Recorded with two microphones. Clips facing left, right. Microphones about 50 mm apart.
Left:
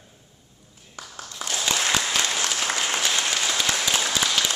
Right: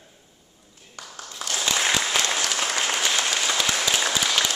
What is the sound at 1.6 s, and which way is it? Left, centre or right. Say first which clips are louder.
Applause: right 1 dB; centre.